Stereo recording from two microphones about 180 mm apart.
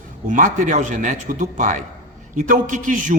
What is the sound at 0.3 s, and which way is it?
Speech, 45° right (ahead or behind).